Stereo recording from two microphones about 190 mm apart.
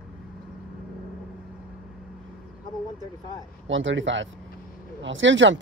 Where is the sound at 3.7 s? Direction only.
85° right.